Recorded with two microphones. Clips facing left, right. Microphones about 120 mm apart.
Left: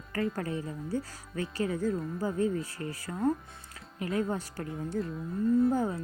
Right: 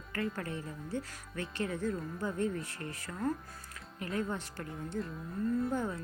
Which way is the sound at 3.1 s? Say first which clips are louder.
Left 6 dB; 35° left (ahead or behind).